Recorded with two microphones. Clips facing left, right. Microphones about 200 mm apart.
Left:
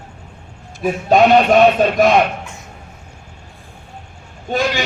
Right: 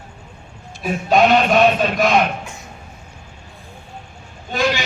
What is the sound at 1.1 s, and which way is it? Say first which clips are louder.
Speech: left 3 dB; 50° left (ahead or behind).